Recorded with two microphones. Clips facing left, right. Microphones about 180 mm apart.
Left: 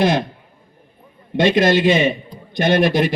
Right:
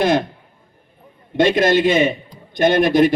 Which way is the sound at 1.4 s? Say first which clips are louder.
Even; 50° right (ahead or behind).